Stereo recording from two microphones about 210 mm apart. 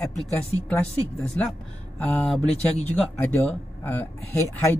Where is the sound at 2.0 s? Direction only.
5° left (ahead or behind).